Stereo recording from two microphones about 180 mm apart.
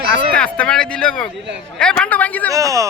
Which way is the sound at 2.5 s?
15° right (ahead or behind).